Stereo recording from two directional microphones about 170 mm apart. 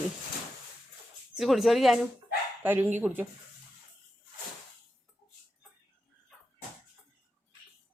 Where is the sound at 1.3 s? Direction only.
Centre (ahead or behind).